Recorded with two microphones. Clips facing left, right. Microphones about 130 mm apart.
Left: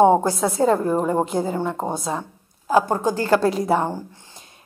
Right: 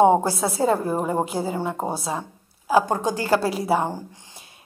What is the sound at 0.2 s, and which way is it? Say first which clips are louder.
Speech: left 2 dB; 35° right (ahead or behind).